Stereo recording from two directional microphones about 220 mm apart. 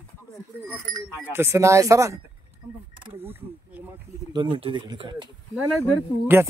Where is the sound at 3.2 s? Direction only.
10° right (ahead or behind).